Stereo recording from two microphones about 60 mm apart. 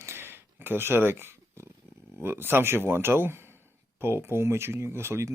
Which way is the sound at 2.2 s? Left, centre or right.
Right.